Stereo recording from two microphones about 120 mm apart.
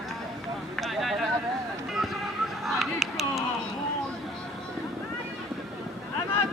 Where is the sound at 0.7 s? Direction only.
Centre (ahead or behind).